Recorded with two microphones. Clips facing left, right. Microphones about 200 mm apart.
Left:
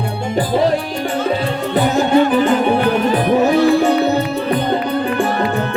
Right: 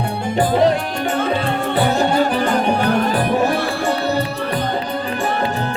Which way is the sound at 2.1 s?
45° right (ahead or behind).